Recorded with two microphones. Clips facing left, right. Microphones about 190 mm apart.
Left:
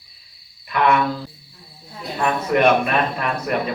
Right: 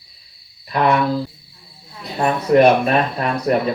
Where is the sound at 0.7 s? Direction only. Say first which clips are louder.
Right 1 dB; 35° right (ahead or behind).